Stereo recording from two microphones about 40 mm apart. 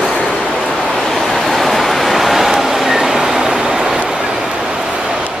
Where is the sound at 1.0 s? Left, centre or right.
Centre.